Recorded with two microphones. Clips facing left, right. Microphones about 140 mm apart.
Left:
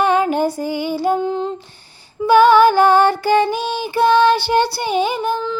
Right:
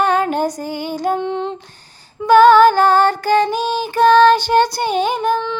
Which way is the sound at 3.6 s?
45° right (ahead or behind).